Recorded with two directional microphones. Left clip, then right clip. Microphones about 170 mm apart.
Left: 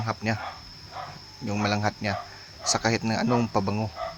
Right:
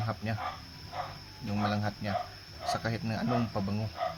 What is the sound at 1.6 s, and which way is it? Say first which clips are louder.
Speech: left 7 dB; 35° left (ahead or behind).